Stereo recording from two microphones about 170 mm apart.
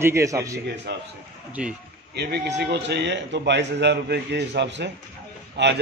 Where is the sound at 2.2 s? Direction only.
80° right.